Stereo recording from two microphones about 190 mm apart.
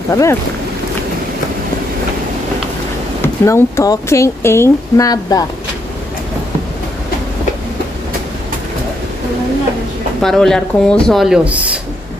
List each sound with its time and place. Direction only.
0.1 s speech: 15° left (ahead or behind)
3.2 s speech: 15° left (ahead or behind)
10.2 s speech: 5° left (ahead or behind)